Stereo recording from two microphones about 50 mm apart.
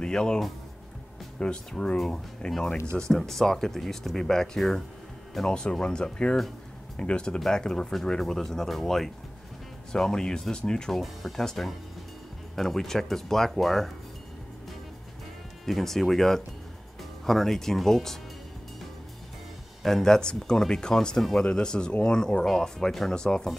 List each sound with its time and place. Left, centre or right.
0.0 s speech: centre
1.4 s speech: centre
15.6 s speech: centre
19.8 s speech: centre